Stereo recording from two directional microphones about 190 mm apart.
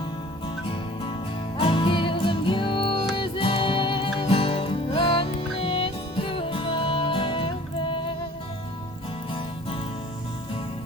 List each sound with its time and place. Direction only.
0.4 s music: 25° left (ahead or behind)
9.3 s music: 30° left (ahead or behind)